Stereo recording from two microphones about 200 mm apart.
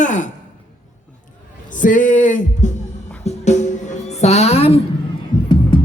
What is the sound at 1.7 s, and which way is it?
Speech, 40° left (ahead or behind).